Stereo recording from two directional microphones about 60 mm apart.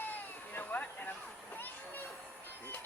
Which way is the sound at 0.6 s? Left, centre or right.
Left.